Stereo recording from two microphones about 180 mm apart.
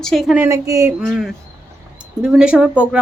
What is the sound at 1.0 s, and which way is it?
Speech, 5° right (ahead or behind).